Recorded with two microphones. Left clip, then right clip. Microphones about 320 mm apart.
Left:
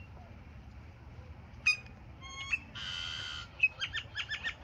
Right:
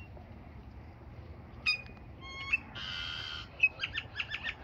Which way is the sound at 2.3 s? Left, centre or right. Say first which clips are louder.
Right 2 dB; centre.